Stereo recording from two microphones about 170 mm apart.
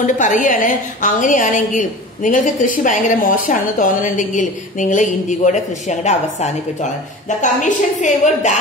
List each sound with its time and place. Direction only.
0.0 s a woman's voice: 50° left (ahead or behind)